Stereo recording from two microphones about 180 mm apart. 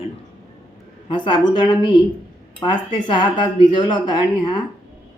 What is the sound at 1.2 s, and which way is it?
A woman's voice, 25° left (ahead or behind).